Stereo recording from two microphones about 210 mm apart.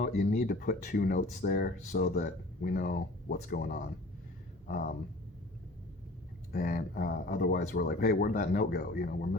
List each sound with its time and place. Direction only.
0.0 s speech: 40° left (ahead or behind)
6.5 s speech: 45° left (ahead or behind)